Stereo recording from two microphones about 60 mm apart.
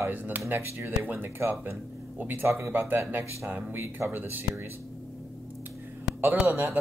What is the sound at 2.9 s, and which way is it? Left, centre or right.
Speech, right.